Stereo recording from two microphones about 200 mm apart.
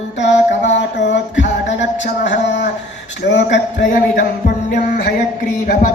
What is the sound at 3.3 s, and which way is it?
Speech, 65° left (ahead or behind).